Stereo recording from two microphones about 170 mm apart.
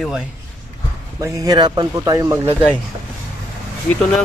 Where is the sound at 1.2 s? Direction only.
20° right (ahead or behind).